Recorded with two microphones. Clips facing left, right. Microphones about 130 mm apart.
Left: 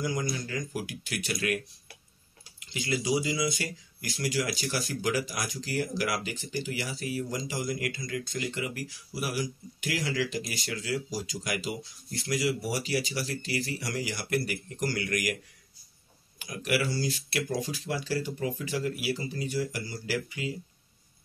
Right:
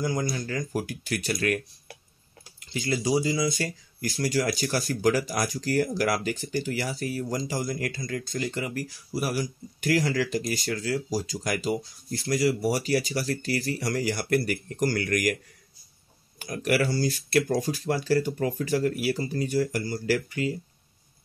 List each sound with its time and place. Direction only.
0.0 s speech: 35° right (ahead or behind)
2.6 s speech: 40° right (ahead or behind)
16.3 s speech: 45° right (ahead or behind)